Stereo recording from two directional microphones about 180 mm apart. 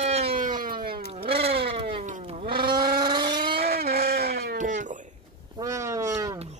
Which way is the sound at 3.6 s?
60° right (ahead or behind).